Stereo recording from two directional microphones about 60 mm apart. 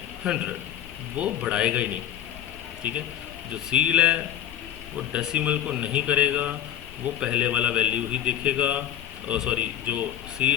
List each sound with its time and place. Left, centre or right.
0.3 s a man's voice: centre
5.2 s a man's voice: centre